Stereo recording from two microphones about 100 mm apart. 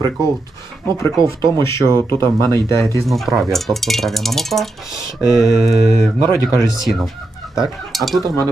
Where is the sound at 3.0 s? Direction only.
Centre (ahead or behind).